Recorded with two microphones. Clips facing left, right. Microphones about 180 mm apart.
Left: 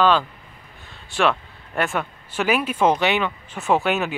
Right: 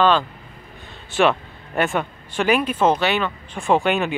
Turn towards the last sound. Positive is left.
turn(degrees=5)  # may be behind; listen again after turning